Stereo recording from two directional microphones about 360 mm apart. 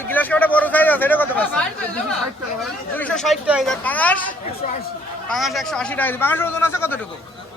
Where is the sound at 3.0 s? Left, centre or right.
Centre.